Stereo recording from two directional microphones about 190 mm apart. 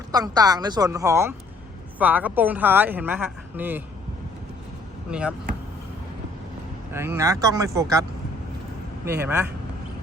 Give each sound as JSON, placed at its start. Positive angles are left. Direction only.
{"t": 0.1, "sound": "speech", "side_deg": -20}
{"t": 6.9, "sound": "speech", "side_deg": -15}
{"t": 9.0, "sound": "speech", "side_deg": -10}